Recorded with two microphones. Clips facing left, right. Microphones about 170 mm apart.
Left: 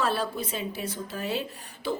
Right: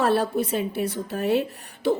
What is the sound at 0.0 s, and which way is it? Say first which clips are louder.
A woman's voice: right 7 dB; 60° right (ahead or behind).